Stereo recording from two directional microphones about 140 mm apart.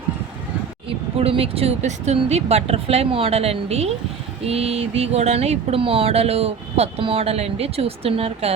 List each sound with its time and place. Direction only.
0.9 s speech: 40° right (ahead or behind)